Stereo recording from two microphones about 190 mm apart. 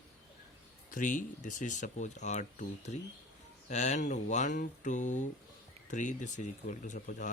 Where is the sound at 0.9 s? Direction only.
45° left (ahead or behind).